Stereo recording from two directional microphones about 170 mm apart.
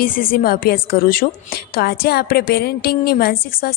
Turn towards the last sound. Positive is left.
turn(degrees=60)  # may be behind; listen again after turning